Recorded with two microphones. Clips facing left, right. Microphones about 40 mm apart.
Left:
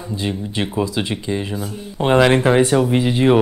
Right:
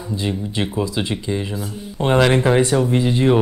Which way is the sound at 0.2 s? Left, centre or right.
Centre.